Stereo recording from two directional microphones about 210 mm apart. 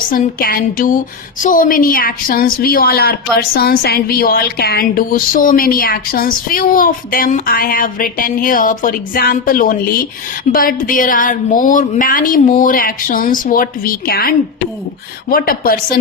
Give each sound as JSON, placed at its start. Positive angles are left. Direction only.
{"t": 0.1, "sound": "a woman's voice", "side_deg": 40}